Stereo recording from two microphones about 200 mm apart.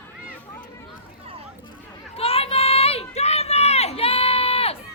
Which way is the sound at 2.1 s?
30° left (ahead or behind).